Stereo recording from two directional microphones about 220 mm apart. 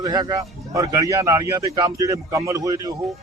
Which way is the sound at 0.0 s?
15° right (ahead or behind).